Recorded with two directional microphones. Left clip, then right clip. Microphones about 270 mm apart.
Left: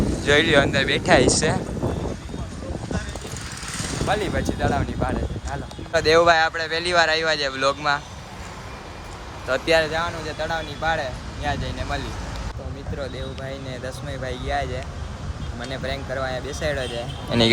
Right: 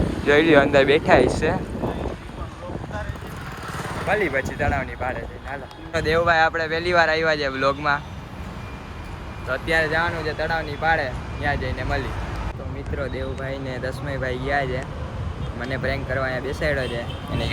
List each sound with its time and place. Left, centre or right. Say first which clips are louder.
0.3 s speech: right 2 dB; centre
4.1 s speech: right 2 dB; centre
5.9 s speech: left 4 dB; left
6.2 s speech: left 1 dB; centre
9.5 s speech: left 2 dB; centre
9.9 s speech: right 3 dB; centre